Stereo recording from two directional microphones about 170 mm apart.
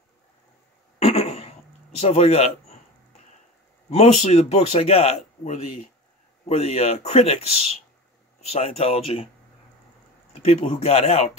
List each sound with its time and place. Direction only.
0.9 s a sound: 35° left (ahead or behind)
2.0 s a man's voice: 40° left (ahead or behind)
3.9 s a man's voice: 40° left (ahead or behind)
10.4 s a man's voice: 35° left (ahead or behind)